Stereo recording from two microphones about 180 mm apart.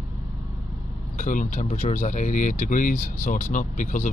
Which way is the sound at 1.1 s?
45° left (ahead or behind).